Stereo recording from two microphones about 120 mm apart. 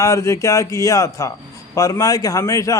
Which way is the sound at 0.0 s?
25° left (ahead or behind).